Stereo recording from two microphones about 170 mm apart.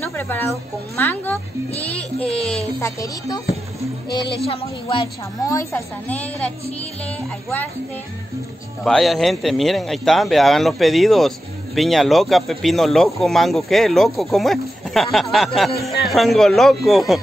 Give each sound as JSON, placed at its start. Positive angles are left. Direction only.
{"t": 0.0, "sound": "speech", "side_deg": 15}
{"t": 1.8, "sound": "music", "side_deg": 10}
{"t": 2.8, "sound": "speech", "side_deg": 20}
{"t": 4.5, "sound": "a woman's voice", "side_deg": 30}
{"t": 5.5, "sound": "a woman's voice", "side_deg": 15}
{"t": 8.8, "sound": "a man's voice", "side_deg": 0}